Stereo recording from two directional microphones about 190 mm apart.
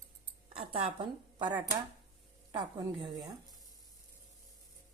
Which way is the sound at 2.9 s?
25° right (ahead or behind).